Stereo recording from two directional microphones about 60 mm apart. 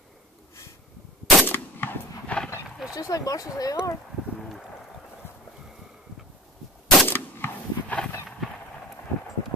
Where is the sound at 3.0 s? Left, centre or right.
Left.